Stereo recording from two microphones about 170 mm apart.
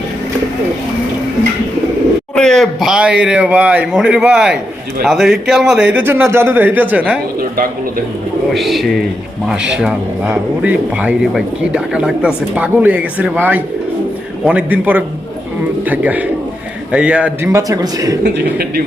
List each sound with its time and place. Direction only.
2.3 s a man's voice: 5° left (ahead or behind)
8.5 s a man's voice: centre (ahead or behind)
17.5 s a man's voice: 20° right (ahead or behind)
18.2 s a man's voice: 65° right (ahead or behind)